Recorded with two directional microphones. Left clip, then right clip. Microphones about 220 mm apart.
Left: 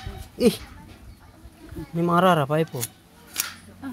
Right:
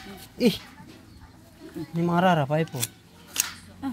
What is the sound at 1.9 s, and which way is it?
Speech, 15° left (ahead or behind).